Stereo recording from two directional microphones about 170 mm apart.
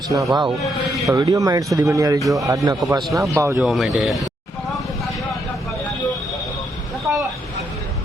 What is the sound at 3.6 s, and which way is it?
Speech, centre (ahead or behind).